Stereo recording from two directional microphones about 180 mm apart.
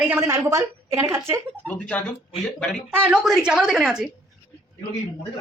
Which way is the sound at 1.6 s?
5° left (ahead or behind).